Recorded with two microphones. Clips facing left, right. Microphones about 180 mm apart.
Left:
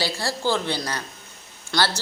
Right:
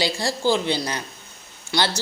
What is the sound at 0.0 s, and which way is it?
Speech, 15° right (ahead or behind).